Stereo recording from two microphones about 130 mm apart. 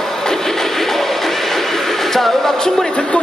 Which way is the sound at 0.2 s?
5° left (ahead or behind).